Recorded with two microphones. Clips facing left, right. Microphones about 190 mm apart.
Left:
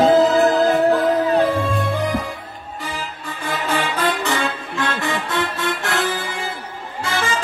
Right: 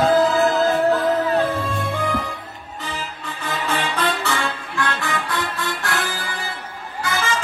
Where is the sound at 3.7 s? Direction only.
15° left (ahead or behind).